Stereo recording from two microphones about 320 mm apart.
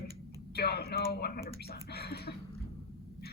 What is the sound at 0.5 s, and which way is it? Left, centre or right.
Speech, left.